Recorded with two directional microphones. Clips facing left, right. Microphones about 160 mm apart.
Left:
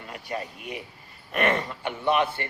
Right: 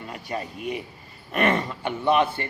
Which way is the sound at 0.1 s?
30° right (ahead or behind).